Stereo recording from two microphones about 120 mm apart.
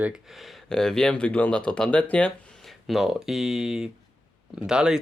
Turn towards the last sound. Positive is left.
turn(degrees=-5)  # may be behind; listen again after turning